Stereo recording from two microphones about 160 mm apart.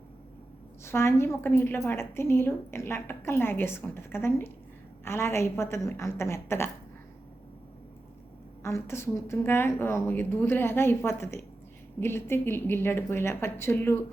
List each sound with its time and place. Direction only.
0.9 s a woman's voice: 15° left (ahead or behind)
8.6 s a woman's voice: 15° left (ahead or behind)